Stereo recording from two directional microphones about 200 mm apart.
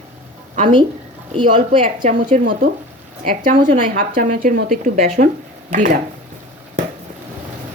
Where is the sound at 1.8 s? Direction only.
40° right (ahead or behind).